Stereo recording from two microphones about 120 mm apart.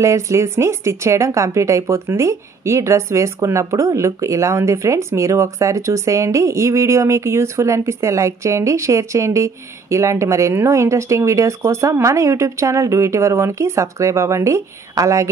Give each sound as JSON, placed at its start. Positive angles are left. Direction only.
{"t": 0.0, "sound": "speech", "side_deg": -25}